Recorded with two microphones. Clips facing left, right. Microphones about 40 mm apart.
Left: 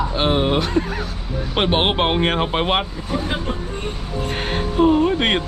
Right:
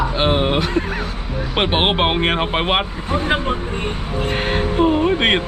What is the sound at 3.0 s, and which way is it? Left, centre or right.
Speech, right.